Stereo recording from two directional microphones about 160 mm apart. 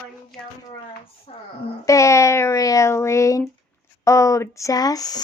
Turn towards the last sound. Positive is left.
turn(degrees=25)  # may be behind; listen again after turning